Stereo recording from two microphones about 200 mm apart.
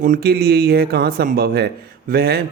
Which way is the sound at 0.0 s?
45° right (ahead or behind).